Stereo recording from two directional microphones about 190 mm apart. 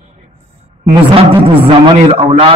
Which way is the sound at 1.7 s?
30° right (ahead or behind).